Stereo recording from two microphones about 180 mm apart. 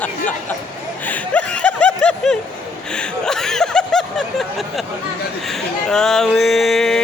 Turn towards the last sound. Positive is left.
turn(degrees=0)  # may be behind; listen again after turning